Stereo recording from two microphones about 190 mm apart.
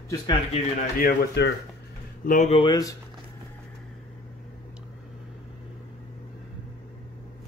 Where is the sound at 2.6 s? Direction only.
20° left (ahead or behind).